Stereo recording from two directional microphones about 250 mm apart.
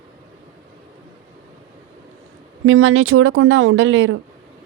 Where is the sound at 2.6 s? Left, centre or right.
Right.